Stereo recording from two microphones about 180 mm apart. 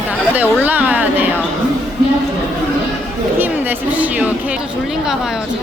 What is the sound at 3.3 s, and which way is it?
Speech, 10° right (ahead or behind).